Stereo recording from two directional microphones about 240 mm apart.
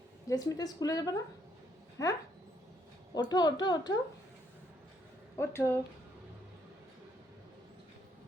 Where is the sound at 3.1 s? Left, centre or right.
Centre.